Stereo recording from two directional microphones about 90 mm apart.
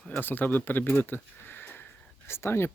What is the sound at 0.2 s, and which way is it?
Speech, 20° left (ahead or behind).